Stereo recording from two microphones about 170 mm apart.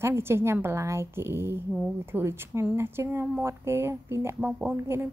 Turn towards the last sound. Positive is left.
turn(degrees=-10)  # may be behind; listen again after turning